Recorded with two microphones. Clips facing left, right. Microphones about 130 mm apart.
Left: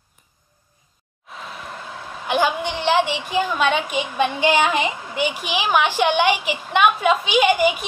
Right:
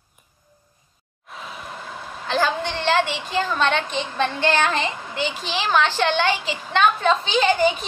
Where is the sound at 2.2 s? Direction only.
15° left (ahead or behind).